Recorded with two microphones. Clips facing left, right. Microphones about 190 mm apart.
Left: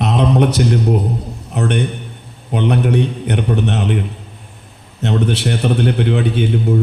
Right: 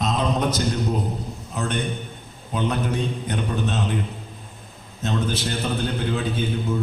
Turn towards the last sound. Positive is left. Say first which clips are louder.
# left 8 dB
turn(degrees=70)  # may be behind; listen again after turning